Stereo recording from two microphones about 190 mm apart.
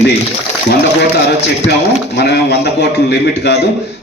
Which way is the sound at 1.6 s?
60° left (ahead or behind).